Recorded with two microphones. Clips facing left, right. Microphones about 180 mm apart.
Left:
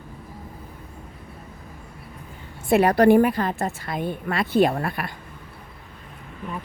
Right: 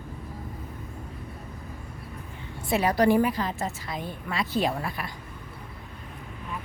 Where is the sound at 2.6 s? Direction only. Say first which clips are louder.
Left 6 dB; 55° left (ahead or behind).